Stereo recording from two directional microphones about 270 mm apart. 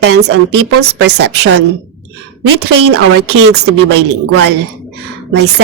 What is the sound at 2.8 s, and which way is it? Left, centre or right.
A woman's voice, right.